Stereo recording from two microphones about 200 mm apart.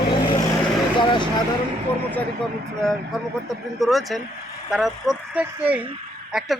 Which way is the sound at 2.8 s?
Centre (ahead or behind).